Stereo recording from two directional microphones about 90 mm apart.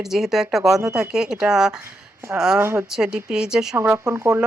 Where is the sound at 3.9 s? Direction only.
35° right (ahead or behind).